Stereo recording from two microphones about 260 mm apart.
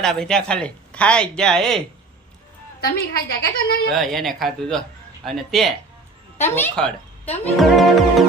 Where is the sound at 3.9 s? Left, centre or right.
Centre.